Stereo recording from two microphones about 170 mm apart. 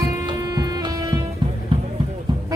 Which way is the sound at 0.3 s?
25° right (ahead or behind).